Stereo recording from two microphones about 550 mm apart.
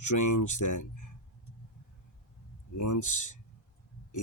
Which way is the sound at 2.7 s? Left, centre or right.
Left.